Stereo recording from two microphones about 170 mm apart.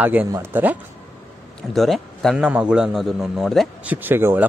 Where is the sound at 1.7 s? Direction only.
Centre (ahead or behind).